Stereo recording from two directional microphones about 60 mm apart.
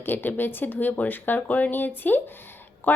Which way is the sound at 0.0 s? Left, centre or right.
Left.